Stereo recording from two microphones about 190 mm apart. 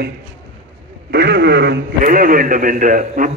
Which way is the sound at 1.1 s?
60° right (ahead or behind).